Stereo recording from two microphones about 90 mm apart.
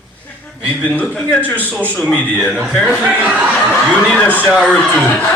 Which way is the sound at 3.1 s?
15° right (ahead or behind).